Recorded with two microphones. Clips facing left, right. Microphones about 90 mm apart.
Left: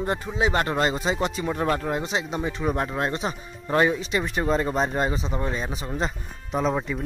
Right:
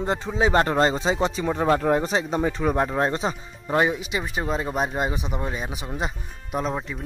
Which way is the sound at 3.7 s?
15° right (ahead or behind).